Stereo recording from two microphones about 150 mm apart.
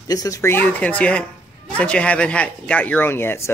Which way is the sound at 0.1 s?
25° left (ahead or behind).